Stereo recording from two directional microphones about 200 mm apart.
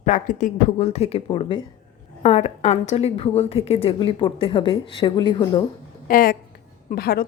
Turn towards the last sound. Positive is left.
turn(degrees=50)  # may be behind; listen again after turning